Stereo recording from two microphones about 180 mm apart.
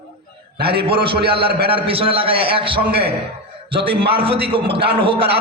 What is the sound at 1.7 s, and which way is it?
A man's voice, 30° right (ahead or behind).